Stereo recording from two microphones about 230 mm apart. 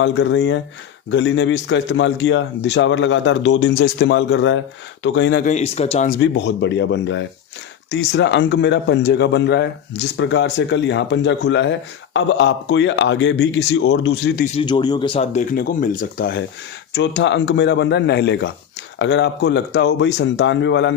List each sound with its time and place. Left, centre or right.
0.0 s speech: left
5.5 s speech: left
6.1 s speech: left
14.4 s speech: left
16.9 s speech: left